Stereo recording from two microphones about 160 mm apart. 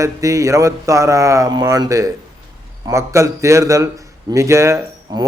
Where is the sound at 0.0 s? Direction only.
20° right (ahead or behind).